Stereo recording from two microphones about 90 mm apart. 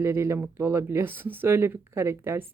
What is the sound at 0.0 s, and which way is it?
Speech, 30° right (ahead or behind).